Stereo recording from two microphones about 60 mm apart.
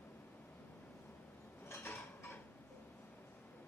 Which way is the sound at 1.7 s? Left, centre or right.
Left.